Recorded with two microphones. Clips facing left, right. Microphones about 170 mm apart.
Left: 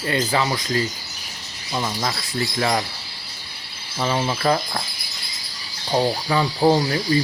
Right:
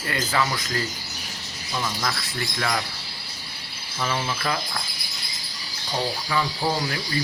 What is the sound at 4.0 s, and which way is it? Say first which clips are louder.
Speech: left 6 dB; 30° left (ahead or behind).